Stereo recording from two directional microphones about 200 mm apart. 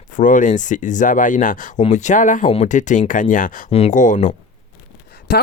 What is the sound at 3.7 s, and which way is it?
Speech, 30° left (ahead or behind).